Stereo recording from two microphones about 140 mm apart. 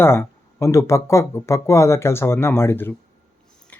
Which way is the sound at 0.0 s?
15° left (ahead or behind).